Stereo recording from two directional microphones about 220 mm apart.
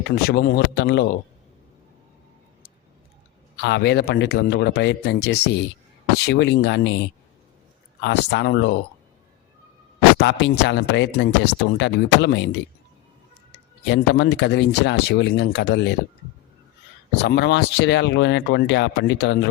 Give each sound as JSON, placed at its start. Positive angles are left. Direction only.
{"t": 0.2, "sound": "speech", "side_deg": 45}
{"t": 3.6, "sound": "speech", "side_deg": 50}
{"t": 8.0, "sound": "speech", "side_deg": 50}
{"t": 10.2, "sound": "speech", "side_deg": 50}
{"t": 13.8, "sound": "speech", "side_deg": 55}
{"t": 17.2, "sound": "speech", "side_deg": 50}